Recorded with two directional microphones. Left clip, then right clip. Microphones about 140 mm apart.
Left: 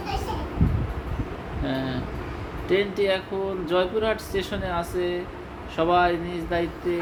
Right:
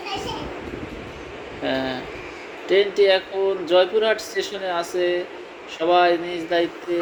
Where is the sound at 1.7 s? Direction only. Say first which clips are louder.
Right 5 dB; 35° right (ahead or behind).